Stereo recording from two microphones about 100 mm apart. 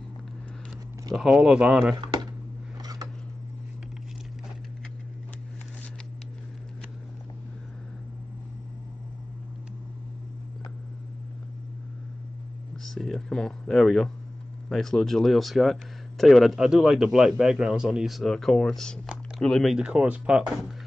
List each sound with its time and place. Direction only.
1.1 s speech: 5° right (ahead or behind)
2.8 s scissors: 40° right (ahead or behind)
12.8 s a sound: 5° left (ahead or behind)
14.7 s speech: 5° left (ahead or behind)
19.7 s speech: 10° right (ahead or behind)